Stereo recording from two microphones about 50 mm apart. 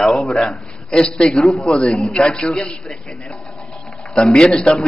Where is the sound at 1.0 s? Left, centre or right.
Centre.